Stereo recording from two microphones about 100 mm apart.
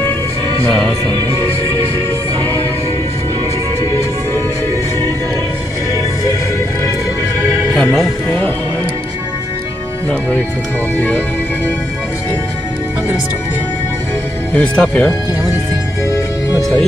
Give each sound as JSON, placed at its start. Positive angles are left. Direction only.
{"t": 7.9, "sound": "speech", "side_deg": 10}
{"t": 11.0, "sound": "music", "side_deg": 20}
{"t": 14.5, "sound": "speech", "side_deg": 10}
{"t": 16.1, "sound": "music", "side_deg": 30}